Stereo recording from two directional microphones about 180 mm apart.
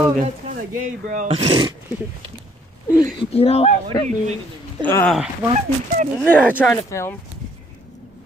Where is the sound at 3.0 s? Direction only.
30° left (ahead or behind).